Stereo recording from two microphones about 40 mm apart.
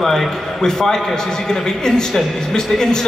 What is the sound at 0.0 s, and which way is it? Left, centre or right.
A man's voice, centre.